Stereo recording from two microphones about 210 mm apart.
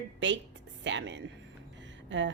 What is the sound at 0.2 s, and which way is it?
Speech, 60° right (ahead or behind).